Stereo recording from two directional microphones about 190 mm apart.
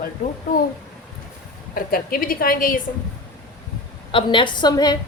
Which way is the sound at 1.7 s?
50° left (ahead or behind).